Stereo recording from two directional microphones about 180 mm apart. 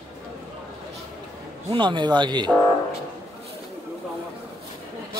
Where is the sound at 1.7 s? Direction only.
25° right (ahead or behind).